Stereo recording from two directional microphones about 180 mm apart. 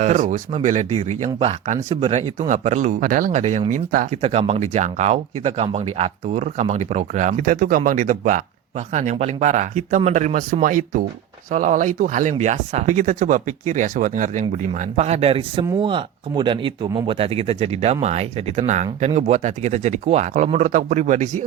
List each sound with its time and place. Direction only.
0.0 s speech: 45° right (ahead or behind)